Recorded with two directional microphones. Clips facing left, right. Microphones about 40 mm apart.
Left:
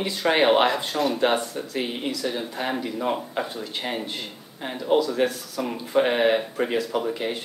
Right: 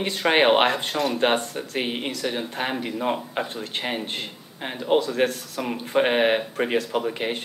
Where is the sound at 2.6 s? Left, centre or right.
Right.